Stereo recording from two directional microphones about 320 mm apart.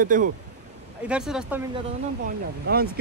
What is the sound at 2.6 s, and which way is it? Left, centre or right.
Speech, right.